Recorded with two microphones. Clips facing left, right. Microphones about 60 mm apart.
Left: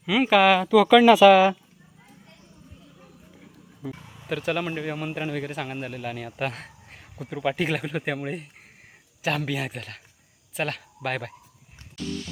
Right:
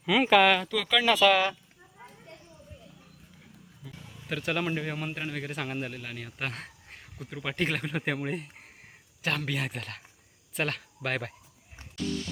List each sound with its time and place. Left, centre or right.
0.0 s speech: centre
3.8 s speech: left
4.3 s a man's voice: centre